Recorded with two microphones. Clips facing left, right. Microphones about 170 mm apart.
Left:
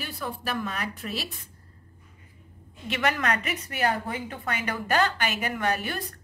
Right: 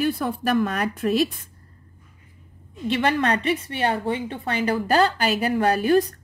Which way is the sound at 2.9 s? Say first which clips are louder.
Right 5 dB; 30° right (ahead or behind).